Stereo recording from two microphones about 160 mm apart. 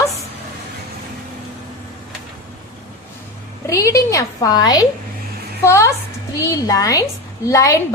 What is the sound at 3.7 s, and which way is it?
A woman's voice, 20° left (ahead or behind).